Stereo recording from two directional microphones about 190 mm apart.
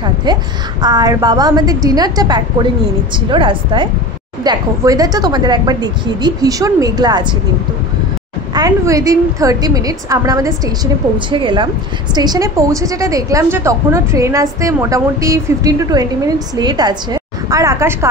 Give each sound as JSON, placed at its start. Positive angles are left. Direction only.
{"t": 0.0, "sound": "a woman's voice", "side_deg": -20}
{"t": 8.5, "sound": "a woman's voice", "side_deg": -20}